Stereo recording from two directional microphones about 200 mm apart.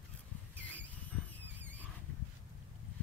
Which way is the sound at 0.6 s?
5° left (ahead or behind).